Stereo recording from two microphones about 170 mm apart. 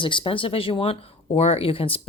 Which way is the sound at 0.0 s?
30° left (ahead or behind).